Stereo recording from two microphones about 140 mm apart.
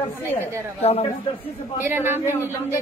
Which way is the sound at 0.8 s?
45° left (ahead or behind).